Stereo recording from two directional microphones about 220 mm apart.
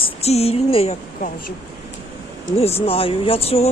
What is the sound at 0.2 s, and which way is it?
Speech, 30° left (ahead or behind).